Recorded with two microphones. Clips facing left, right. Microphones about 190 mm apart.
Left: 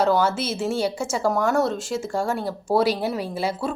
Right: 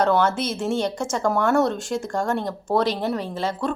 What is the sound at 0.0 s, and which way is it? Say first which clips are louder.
A woman's voice: even; 5° left (ahead or behind).